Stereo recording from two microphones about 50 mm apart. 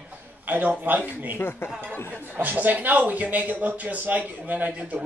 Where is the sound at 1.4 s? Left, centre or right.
Left.